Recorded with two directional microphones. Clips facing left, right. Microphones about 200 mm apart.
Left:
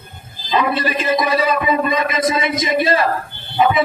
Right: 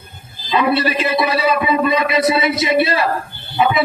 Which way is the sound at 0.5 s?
45° left (ahead or behind).